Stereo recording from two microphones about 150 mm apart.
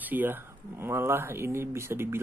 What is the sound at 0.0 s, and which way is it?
Speech, 10° right (ahead or behind).